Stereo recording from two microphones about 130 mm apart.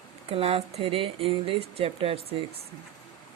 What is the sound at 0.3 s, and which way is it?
Speech, 50° right (ahead or behind).